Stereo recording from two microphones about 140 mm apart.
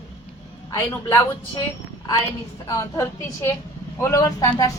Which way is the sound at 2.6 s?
25° left (ahead or behind).